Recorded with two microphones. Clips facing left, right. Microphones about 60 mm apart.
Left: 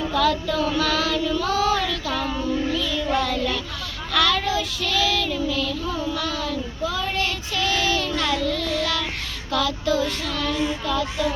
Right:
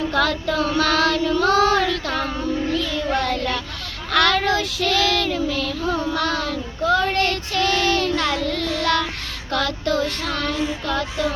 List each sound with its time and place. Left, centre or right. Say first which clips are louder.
0.1 s child singing: left 2 dB; right